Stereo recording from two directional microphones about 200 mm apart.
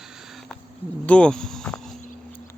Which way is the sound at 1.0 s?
5° left (ahead or behind).